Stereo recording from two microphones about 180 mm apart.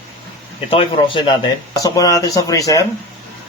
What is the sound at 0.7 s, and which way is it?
Speech, 30° left (ahead or behind).